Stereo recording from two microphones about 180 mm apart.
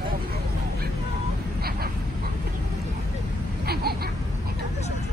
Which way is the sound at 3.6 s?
60° right (ahead or behind).